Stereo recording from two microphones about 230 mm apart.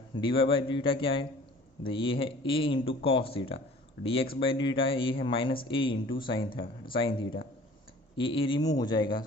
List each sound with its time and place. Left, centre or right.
0.2 s speech: left